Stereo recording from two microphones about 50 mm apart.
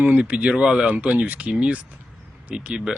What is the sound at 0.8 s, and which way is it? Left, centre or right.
Speech, right.